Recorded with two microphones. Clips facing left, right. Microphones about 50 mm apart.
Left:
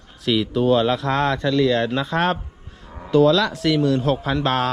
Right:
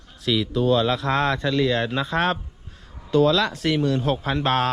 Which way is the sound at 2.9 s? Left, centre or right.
Left.